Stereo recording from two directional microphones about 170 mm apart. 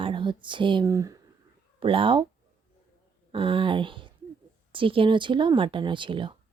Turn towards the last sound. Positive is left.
turn(degrees=-30)  # may be behind; listen again after turning